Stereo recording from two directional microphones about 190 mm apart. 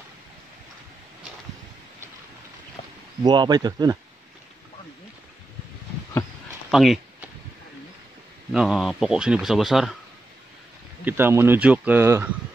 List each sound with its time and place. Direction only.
3.3 s speech: 20° right (ahead or behind)
6.7 s a sound: centre (ahead or behind)
8.5 s speech: centre (ahead or behind)
11.1 s speech: 10° right (ahead or behind)